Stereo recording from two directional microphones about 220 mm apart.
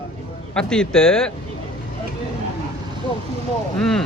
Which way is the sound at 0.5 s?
5° left (ahead or behind).